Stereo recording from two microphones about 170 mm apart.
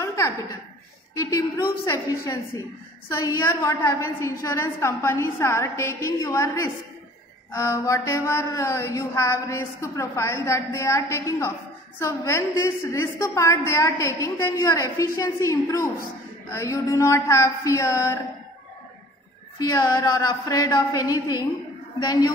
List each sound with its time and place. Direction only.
0.0 s chuckle: 20° left (ahead or behind)
1.1 s a woman's voice: 20° left (ahead or behind)
3.1 s a sound: 15° left (ahead or behind)
19.6 s a woman's voice: 20° left (ahead or behind)